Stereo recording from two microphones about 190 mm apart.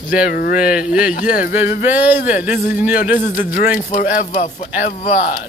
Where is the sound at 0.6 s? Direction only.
5° right (ahead or behind).